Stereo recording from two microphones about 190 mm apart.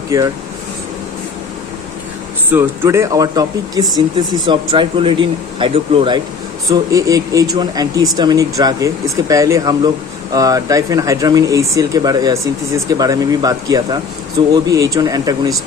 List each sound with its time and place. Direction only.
2.5 s speech: 10° right (ahead or behind)